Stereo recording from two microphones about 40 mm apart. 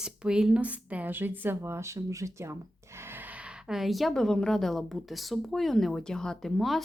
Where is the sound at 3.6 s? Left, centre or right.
Centre.